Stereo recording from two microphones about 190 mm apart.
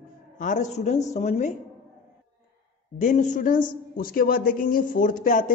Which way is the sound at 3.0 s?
40° left (ahead or behind).